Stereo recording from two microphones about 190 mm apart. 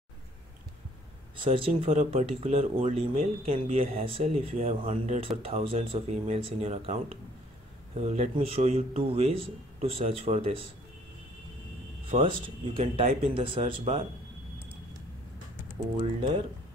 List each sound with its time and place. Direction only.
1.4 s speech: 30° right (ahead or behind)
12.1 s speech: 25° right (ahead or behind)
16.0 s speech: 30° right (ahead or behind)